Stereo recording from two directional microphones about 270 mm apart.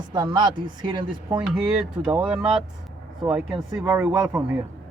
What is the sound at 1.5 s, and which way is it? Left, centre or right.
Speech, centre.